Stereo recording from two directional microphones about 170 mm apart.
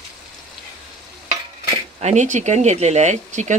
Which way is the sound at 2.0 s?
45° right (ahead or behind).